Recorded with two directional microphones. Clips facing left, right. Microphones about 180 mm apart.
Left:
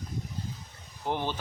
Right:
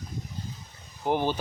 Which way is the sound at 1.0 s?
10° right (ahead or behind).